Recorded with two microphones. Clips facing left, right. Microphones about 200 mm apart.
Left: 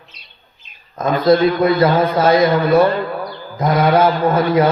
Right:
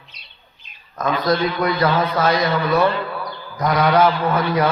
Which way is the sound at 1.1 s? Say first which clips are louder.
Left 8 dB; 45° left (ahead or behind).